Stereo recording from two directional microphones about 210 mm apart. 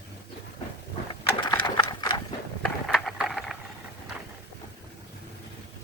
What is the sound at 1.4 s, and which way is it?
Horse, 20° left (ahead or behind).